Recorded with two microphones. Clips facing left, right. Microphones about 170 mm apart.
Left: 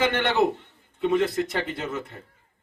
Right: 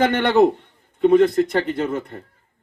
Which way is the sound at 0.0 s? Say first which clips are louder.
Right 6 dB; 50° right (ahead or behind).